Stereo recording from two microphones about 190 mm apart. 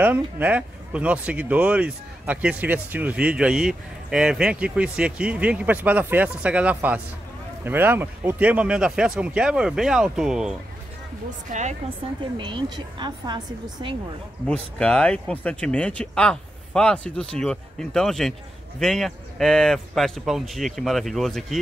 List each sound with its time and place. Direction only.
0.0 s speech: 10° right (ahead or behind)
11.2 s speech: 40° right (ahead or behind)
12.4 s a woman's voice: 25° right (ahead or behind)
14.5 s speech: 5° left (ahead or behind)